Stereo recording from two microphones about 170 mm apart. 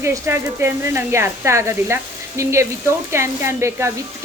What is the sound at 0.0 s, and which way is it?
Speech, 15° right (ahead or behind).